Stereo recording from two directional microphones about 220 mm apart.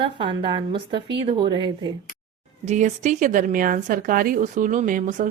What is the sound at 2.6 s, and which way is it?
Speech, 30° right (ahead or behind).